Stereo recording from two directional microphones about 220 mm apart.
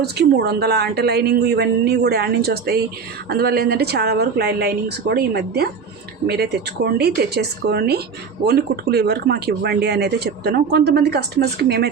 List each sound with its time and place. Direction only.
0.0 s speech: 45° right (ahead or behind)